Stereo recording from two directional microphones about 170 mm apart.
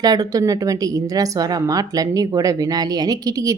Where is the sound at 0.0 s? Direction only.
20° right (ahead or behind).